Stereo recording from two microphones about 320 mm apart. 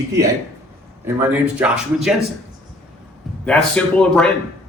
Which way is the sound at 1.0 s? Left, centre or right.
Centre.